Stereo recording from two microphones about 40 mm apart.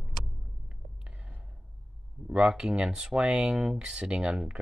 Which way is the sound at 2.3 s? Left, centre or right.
Right.